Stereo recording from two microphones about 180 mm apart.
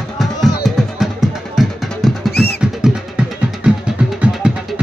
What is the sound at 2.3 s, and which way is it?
Music, 60° left (ahead or behind).